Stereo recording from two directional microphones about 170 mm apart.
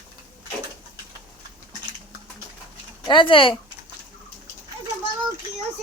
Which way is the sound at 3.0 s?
30° left (ahead or behind).